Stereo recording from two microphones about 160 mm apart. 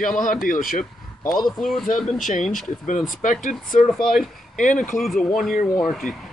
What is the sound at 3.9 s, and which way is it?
Speech, centre (ahead or behind).